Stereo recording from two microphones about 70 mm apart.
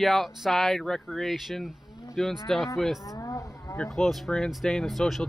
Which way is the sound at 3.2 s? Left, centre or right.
Left.